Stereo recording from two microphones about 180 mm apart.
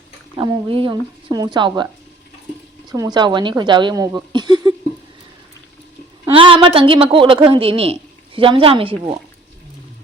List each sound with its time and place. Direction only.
0.3 s speech: 25° right (ahead or behind)
2.9 s speech: 20° right (ahead or behind)
6.3 s speech: 30° right (ahead or behind)